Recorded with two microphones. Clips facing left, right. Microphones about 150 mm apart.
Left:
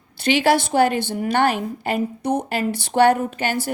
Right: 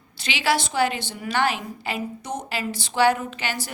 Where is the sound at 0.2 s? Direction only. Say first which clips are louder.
Left 7 dB; 50° left (ahead or behind).